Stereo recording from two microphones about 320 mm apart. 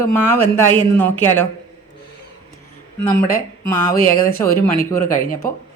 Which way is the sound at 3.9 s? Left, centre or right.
Left.